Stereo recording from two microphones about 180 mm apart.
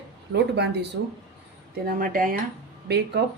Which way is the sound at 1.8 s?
50° right (ahead or behind).